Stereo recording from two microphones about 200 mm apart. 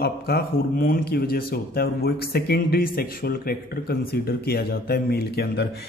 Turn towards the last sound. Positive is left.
turn(degrees=50)  # may be behind; listen again after turning